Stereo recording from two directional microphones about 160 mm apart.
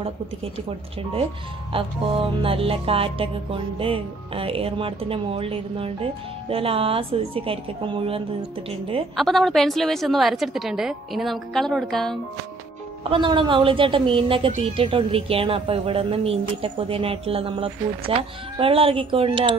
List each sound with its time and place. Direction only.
1.7 s music: 35° right (ahead or behind)
9.1 s a woman's voice: centre (ahead or behind)
13.1 s music: 30° right (ahead or behind)